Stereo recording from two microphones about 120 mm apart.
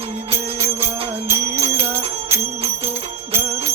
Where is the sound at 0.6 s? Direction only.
20° right (ahead or behind).